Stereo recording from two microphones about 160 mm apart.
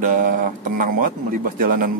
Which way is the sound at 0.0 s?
55° right (ahead or behind).